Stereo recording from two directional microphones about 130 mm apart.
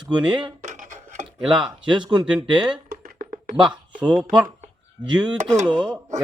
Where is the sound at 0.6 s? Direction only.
65° right (ahead or behind).